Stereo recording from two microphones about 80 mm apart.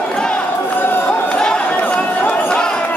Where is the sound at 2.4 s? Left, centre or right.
Centre.